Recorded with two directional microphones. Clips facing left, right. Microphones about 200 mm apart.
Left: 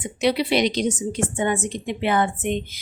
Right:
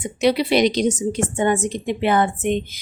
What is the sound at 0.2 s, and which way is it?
Speech, 40° right (ahead or behind).